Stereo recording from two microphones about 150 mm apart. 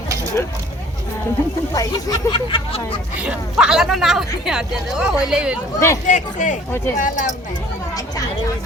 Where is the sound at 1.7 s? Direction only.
25° left (ahead or behind).